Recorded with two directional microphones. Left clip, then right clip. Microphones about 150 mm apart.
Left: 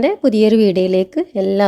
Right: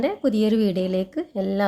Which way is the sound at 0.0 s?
40° left (ahead or behind).